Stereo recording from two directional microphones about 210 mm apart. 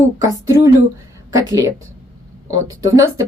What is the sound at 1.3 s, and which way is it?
A woman's voice, 15° right (ahead or behind).